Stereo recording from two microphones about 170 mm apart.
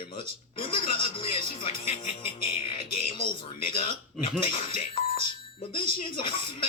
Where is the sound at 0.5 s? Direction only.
30° left (ahead or behind).